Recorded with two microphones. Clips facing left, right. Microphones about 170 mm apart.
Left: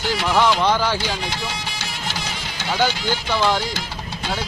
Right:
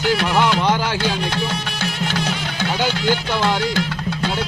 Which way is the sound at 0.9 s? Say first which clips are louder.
Right 4 dB; 60° right (ahead or behind).